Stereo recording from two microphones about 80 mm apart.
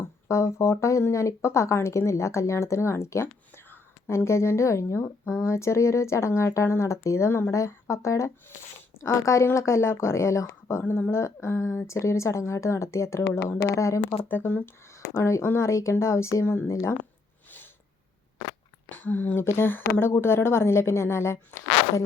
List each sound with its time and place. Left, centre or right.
0.0 s speech: left
14.1 s speech: left
15.1 s speech: left
18.9 s speech: centre; by 22.0 s left